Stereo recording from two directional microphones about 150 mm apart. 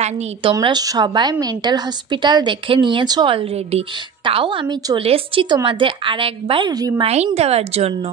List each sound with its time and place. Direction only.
0.0 s a woman's voice: 35° right (ahead or behind)
7.3 s speech: 45° right (ahead or behind)